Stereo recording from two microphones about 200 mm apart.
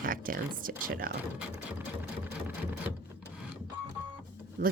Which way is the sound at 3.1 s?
5° right (ahead or behind).